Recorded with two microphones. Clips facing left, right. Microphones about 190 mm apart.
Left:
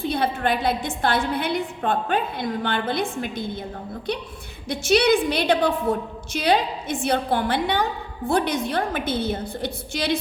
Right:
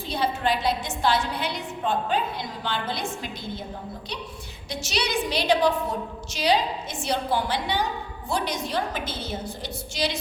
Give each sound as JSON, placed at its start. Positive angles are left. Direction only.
{"t": 0.0, "sound": "a woman's voice", "side_deg": 55}
{"t": 4.7, "sound": "a woman's voice", "side_deg": 55}